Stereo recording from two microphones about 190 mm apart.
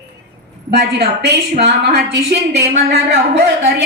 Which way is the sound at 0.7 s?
60° right (ahead or behind).